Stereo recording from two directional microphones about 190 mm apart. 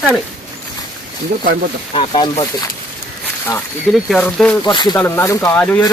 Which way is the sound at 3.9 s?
5° left (ahead or behind).